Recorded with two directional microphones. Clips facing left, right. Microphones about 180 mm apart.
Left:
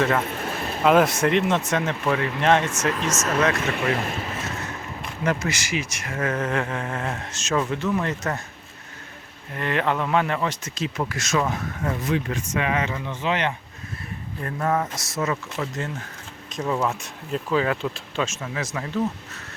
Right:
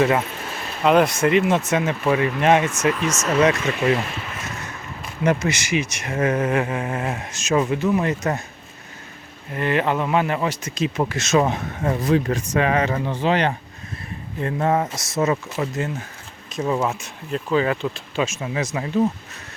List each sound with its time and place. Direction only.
0.3 s a sound: 55° left (ahead or behind)
0.8 s speech: centre (ahead or behind)
3.9 s speech: 40° left (ahead or behind)
5.2 s speech: 20° right (ahead or behind)
9.6 s speech: 5° right (ahead or behind); by 13.6 s 35° right (ahead or behind)
14.4 s speech: 25° right (ahead or behind)
15.5 s speech: 10° right (ahead or behind)